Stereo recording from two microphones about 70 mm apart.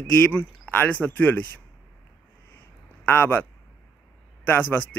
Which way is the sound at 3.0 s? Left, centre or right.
Left.